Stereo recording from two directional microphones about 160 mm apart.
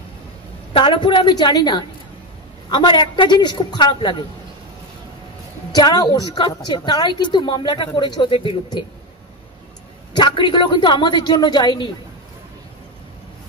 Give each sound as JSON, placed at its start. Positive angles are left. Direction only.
{"t": 0.7, "sound": "a woman's voice", "side_deg": 30}
{"t": 5.8, "sound": "a woman's voice", "side_deg": 25}
{"t": 10.1, "sound": "a woman's voice", "side_deg": 30}